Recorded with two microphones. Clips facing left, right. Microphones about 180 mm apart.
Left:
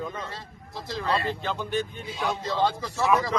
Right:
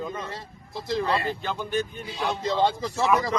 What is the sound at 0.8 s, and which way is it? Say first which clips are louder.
Speech: right 2 dB; 15° right (ahead or behind).